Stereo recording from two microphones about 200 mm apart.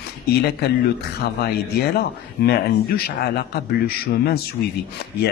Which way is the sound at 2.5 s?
50° left (ahead or behind).